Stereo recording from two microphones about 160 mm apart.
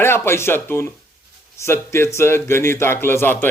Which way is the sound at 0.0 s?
15° left (ahead or behind).